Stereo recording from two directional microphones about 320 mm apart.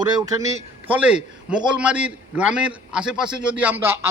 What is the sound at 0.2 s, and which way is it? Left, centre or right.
A man's voice, centre.